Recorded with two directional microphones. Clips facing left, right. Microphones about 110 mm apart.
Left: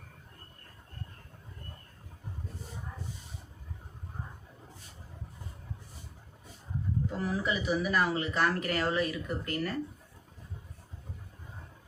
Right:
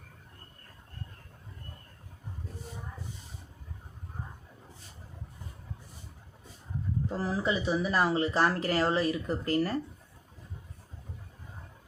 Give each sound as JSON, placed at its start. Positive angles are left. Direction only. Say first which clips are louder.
{"t": 7.2, "sound": "speech", "louder": "right 3 dB", "side_deg": -30}